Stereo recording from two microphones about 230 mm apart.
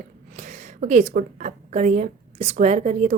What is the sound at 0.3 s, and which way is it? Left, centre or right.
A woman's voice, right.